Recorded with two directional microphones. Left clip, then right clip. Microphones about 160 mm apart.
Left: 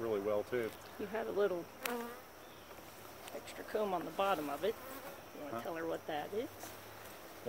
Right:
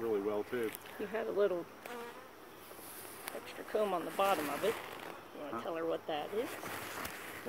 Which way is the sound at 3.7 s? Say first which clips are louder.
Right 3 dB; 5° left (ahead or behind).